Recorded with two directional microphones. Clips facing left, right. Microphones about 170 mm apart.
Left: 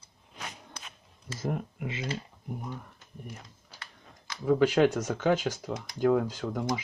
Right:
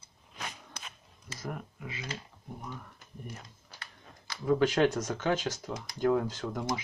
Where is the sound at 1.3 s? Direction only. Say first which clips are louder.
Left 7 dB; 25° left (ahead or behind).